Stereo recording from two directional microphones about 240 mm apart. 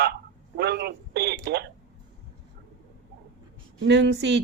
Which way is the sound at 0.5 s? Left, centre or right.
Right.